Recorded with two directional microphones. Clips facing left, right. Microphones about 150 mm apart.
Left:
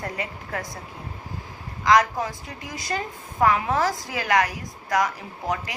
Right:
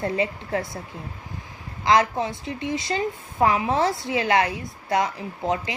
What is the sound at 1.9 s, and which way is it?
A woman's voice, 25° right (ahead or behind).